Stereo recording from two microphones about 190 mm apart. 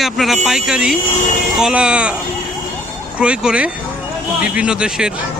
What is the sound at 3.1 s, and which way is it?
Speech, 5° right (ahead or behind).